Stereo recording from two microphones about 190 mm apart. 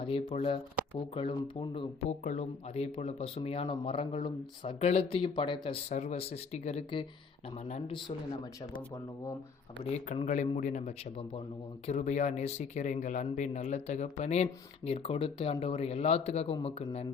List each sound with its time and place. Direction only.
0.0 s speech: 30° left (ahead or behind)
9.9 s speech: 40° left (ahead or behind)